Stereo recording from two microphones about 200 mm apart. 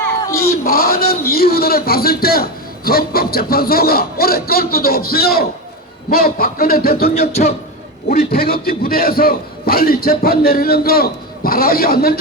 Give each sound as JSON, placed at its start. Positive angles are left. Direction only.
{"t": 0.2, "sound": "cat", "side_deg": 15}
{"t": 0.6, "sound": "a man's voice", "side_deg": 50}
{"t": 7.1, "sound": "a man's voice", "side_deg": 35}
{"t": 8.1, "sound": "a man's voice", "side_deg": 50}